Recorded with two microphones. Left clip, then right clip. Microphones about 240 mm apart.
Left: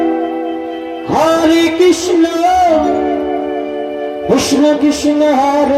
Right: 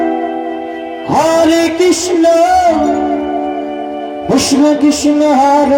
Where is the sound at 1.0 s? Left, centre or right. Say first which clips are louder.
Right 1 dB; right.